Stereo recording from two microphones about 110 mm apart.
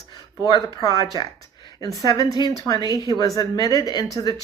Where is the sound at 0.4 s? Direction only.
40° left (ahead or behind).